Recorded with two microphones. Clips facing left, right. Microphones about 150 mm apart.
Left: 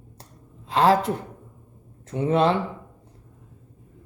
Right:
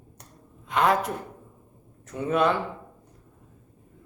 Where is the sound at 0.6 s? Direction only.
30° left (ahead or behind).